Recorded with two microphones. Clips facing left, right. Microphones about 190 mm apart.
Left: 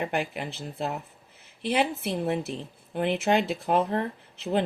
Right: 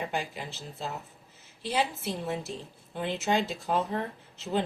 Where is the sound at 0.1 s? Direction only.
60° left (ahead or behind).